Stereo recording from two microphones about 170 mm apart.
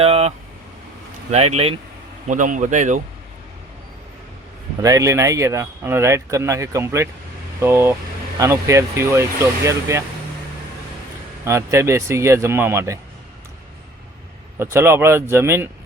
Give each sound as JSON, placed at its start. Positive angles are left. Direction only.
{"t": 0.0, "sound": "speech", "side_deg": -35}
{"t": 2.2, "sound": "speech", "side_deg": -50}
{"t": 4.8, "sound": "speech", "side_deg": -20}
{"t": 11.4, "sound": "speech", "side_deg": -15}
{"t": 14.6, "sound": "speech", "side_deg": -15}